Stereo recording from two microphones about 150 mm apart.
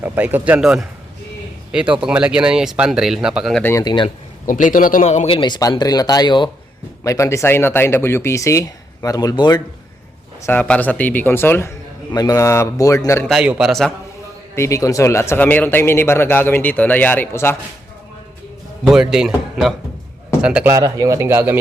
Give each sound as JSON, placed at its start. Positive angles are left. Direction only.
{"t": 0.0, "sound": "speech", "side_deg": -10}
{"t": 3.6, "sound": "speech", "side_deg": 15}
{"t": 3.8, "sound": "speech", "side_deg": 35}
{"t": 4.4, "sound": "speech", "side_deg": 60}
{"t": 5.0, "sound": "speech", "side_deg": 45}
{"t": 5.4, "sound": "speech", "side_deg": 25}
{"t": 7.0, "sound": "speech", "side_deg": 20}
{"t": 10.4, "sound": "speech", "side_deg": 10}
{"t": 13.2, "sound": "speech", "side_deg": -5}
{"t": 14.5, "sound": "speech", "side_deg": 20}
{"t": 18.9, "sound": "speech", "side_deg": -5}
{"t": 20.7, "sound": "a man's voice", "side_deg": -25}